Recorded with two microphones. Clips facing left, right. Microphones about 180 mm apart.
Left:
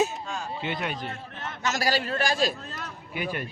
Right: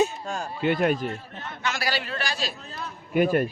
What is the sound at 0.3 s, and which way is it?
Speech, 50° right (ahead or behind).